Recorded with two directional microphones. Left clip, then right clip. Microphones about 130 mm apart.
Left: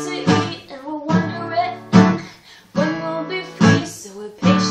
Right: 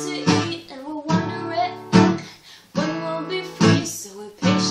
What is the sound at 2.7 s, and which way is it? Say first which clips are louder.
Music: left 3 dB; 25° right (ahead or behind).